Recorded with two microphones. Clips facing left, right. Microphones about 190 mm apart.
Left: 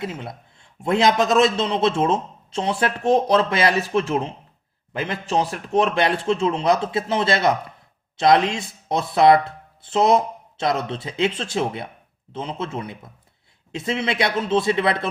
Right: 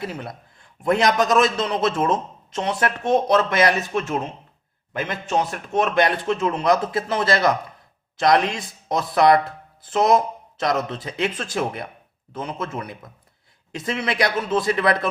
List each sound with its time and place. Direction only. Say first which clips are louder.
0.0 s a man's voice: even; 20° left (ahead or behind)